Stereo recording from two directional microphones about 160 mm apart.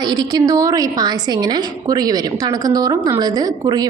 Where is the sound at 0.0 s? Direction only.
25° right (ahead or behind).